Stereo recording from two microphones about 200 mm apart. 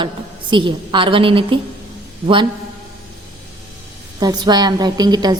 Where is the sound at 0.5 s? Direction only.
25° right (ahead or behind).